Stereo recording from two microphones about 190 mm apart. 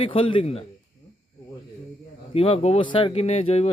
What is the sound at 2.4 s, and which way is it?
Speech, 30° left (ahead or behind).